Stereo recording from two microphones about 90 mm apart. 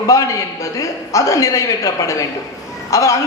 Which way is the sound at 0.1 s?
40° left (ahead or behind).